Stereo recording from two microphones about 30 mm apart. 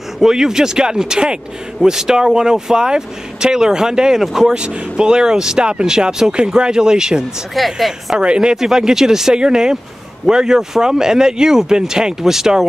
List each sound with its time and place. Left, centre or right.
0.2 s speech: centre
4.2 s speech: centre
4.6 s speech: right
4.9 s speech: right
7.5 s a woman's voice: centre
8.2 s speech: right
8.5 s speech: centre